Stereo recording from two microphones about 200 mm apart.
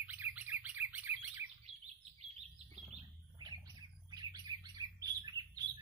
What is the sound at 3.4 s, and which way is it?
Bird, 20° right (ahead or behind).